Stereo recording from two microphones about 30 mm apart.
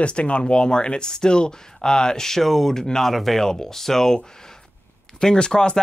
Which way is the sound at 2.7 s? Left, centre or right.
Centre.